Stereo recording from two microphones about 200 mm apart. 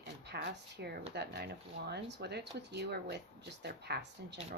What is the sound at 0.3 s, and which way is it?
Speech, 55° right (ahead or behind).